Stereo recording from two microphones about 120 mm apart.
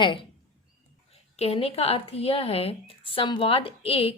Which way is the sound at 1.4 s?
55° left (ahead or behind).